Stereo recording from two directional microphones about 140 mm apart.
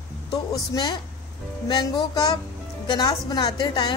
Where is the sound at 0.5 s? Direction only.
30° left (ahead or behind).